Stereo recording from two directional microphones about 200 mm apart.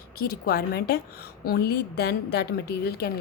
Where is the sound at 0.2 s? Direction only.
50° left (ahead or behind).